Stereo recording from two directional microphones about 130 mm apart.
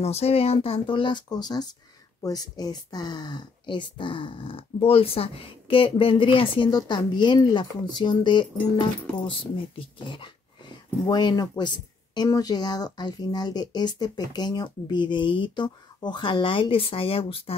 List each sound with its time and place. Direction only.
0.0 s speech: 50° left (ahead or behind)